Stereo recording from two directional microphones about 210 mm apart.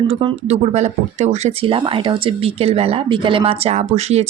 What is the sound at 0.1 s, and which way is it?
Speech, 25° right (ahead or behind).